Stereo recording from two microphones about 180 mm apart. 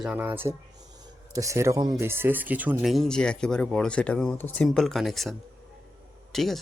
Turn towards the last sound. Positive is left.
turn(degrees=0)  # may be behind; listen again after turning